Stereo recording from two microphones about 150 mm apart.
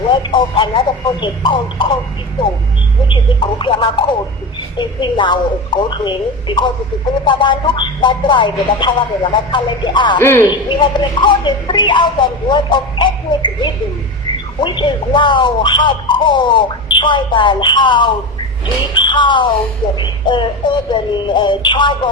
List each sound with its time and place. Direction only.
0.1 s speech: 30° left (ahead or behind)
3.1 s speech: 35° left (ahead or behind)
10.2 s a man's voice: 15° left (ahead or behind)
10.7 s speech: 30° left (ahead or behind)